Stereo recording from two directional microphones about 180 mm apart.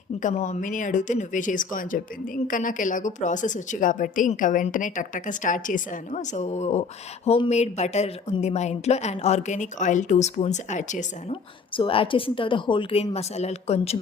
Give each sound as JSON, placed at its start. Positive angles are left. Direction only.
{"t": 0.2, "sound": "speech", "side_deg": 40}
{"t": 11.8, "sound": "speech", "side_deg": 30}